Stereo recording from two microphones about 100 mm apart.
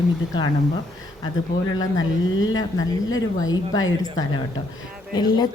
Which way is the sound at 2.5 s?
40° left (ahead or behind).